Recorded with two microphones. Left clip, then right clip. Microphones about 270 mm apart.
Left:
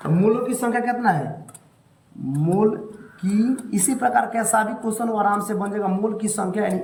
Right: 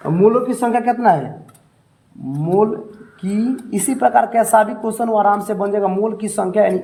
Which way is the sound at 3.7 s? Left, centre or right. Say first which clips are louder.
Right 6 dB; centre.